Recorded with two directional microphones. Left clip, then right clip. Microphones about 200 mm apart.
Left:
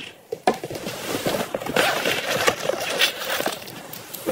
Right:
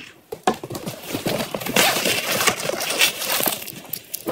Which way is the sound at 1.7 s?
30° right (ahead or behind).